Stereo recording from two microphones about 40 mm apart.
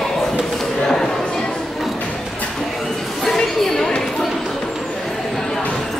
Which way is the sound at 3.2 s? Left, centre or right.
Centre.